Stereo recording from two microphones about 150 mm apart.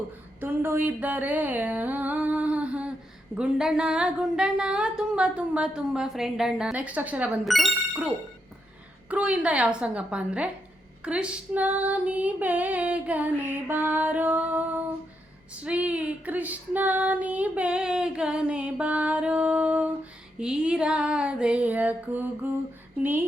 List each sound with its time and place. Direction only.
0.3 s a sound: 15° right (ahead or behind)
3.3 s speech: 5° right (ahead or behind)
9.0 s female singing: 10° right (ahead or behind)